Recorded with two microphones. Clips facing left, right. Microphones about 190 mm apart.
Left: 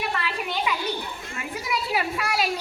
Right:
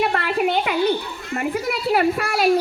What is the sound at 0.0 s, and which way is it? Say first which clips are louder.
A child's voice: right 9 dB; 60° right (ahead or behind).